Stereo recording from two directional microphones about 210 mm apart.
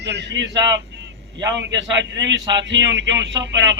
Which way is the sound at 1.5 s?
60° right (ahead or behind).